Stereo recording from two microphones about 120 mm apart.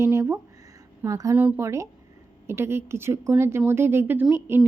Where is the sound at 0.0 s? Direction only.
25° right (ahead or behind).